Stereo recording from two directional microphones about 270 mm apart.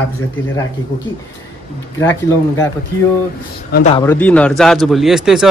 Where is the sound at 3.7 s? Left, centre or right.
Left.